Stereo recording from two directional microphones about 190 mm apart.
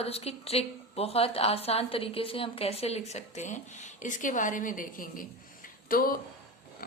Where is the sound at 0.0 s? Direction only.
30° left (ahead or behind).